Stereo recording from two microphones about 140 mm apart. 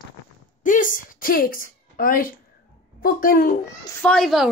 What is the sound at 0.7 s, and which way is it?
A woman's voice, 70° left (ahead or behind).